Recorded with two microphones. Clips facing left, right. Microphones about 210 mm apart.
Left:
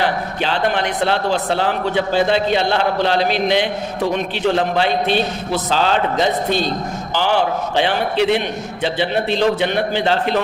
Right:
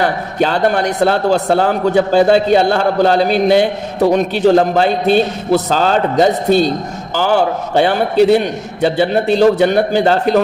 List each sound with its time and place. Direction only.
0.0 s a man's voice: 45° right (ahead or behind)